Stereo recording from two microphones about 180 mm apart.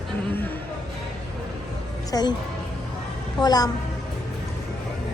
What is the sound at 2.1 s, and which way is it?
Speech, 25° left (ahead or behind).